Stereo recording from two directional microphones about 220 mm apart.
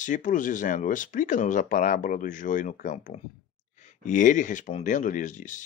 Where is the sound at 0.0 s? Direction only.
35° left (ahead or behind).